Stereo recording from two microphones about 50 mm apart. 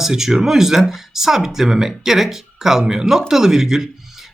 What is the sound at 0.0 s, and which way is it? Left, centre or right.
Speech, centre.